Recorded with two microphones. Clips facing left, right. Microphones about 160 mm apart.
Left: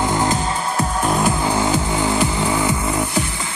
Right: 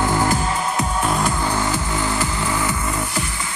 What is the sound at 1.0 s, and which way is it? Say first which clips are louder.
Music: left 3 dB; centre (ahead or behind).